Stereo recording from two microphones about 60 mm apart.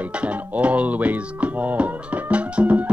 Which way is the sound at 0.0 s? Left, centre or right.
Right.